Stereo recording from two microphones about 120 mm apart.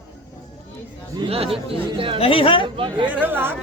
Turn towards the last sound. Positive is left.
turn(degrees=-15)  # may be behind; listen again after turning